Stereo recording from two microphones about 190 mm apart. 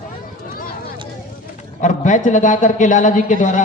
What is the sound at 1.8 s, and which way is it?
A man's voice, 40° left (ahead or behind).